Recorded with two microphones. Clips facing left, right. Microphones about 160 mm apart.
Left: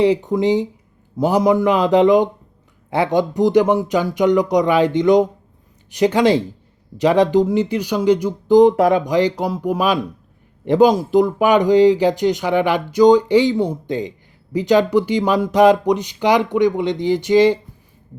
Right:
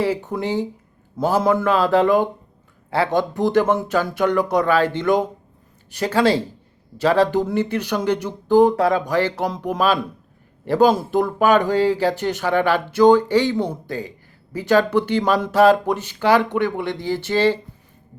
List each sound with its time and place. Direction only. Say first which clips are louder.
0.0 s speech: left 7 dB; 15° left (ahead or behind)